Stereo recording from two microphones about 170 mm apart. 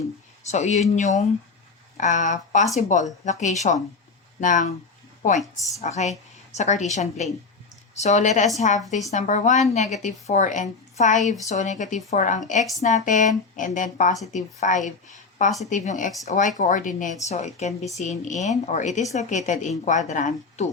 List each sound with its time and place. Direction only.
0.4 s a woman's voice: 45° left (ahead or behind)
5.8 s a woman's voice: 40° left (ahead or behind)